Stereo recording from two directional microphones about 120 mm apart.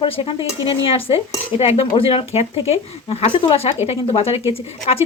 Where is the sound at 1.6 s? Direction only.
60° left (ahead or behind).